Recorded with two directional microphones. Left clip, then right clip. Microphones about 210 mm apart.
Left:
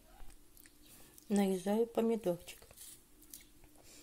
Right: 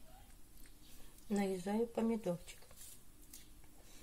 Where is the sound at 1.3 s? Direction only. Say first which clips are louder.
Left 5 dB; 40° left (ahead or behind).